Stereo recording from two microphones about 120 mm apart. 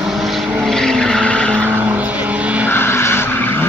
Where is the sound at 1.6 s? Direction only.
15° right (ahead or behind).